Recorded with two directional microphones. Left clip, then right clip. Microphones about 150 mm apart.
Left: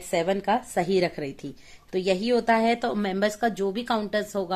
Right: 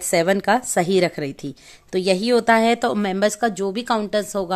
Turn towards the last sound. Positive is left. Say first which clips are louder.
# right 5 dB
turn(degrees=-40)  # may be behind; listen again after turning